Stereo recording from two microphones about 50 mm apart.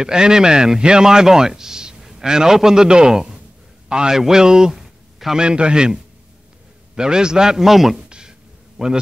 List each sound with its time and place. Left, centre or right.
0.0 s a man's voice: centre
7.0 s speech: centre
8.1 s a sound: centre